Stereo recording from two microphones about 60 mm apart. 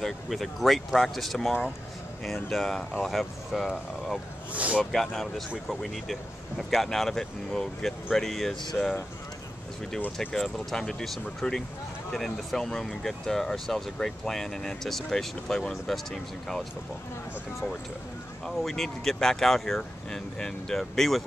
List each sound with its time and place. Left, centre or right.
0.0 s speech: centre
4.5 s speech: right
4.9 s speech: centre
8.8 s speech: left
10.3 s speech: centre
18.6 s speech: centre